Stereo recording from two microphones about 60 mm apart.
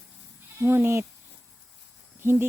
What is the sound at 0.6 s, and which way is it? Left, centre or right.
Speech, right.